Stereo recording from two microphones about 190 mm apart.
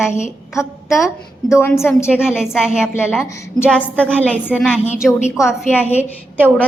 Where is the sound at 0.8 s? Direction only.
Centre (ahead or behind).